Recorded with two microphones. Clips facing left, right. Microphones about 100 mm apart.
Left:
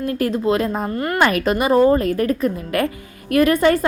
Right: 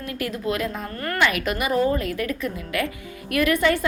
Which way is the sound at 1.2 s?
35° left (ahead or behind).